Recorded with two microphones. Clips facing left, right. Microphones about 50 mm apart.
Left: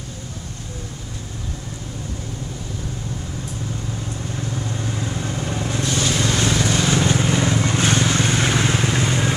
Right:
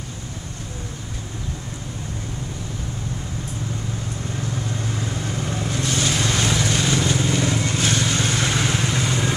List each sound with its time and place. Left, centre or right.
4.4 s vehicle: centre
6.9 s vehicle: left